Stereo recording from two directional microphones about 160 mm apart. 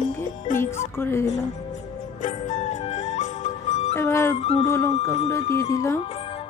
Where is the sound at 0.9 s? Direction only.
15° left (ahead or behind).